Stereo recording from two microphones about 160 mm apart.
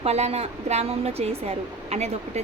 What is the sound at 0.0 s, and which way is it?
A woman's voice, 40° right (ahead or behind).